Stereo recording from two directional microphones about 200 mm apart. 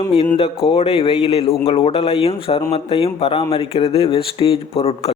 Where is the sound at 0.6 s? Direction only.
30° left (ahead or behind).